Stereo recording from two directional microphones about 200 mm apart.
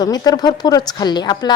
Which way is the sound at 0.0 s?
20° left (ahead or behind).